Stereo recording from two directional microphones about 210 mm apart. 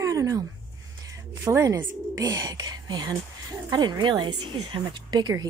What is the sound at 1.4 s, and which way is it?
A woman's voice, 15° right (ahead or behind).